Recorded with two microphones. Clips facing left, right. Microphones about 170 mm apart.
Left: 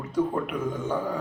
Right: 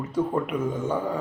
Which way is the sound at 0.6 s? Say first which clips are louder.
Right 2 dB; 25° right (ahead or behind).